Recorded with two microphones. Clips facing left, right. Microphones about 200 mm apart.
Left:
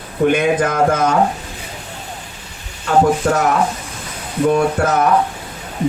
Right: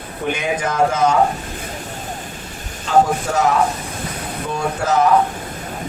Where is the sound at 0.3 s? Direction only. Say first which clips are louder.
Left 6 dB; 55° left (ahead or behind).